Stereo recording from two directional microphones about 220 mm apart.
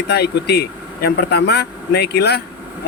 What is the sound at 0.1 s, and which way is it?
Speech, 50° left (ahead or behind).